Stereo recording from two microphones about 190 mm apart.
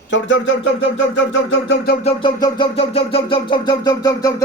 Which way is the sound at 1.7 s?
60° left (ahead or behind).